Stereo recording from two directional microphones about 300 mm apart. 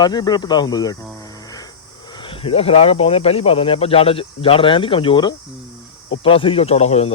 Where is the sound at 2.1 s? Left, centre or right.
Centre.